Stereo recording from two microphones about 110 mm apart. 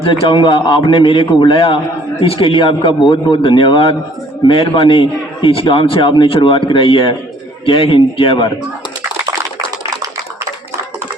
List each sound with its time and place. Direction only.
0.3 s a man's voice: 45° left (ahead or behind)